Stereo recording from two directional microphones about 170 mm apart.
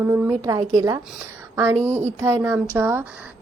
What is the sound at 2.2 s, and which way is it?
Speech, 15° right (ahead or behind).